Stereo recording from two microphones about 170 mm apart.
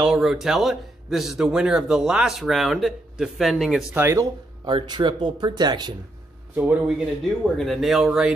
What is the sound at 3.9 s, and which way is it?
Speech, 15° right (ahead or behind).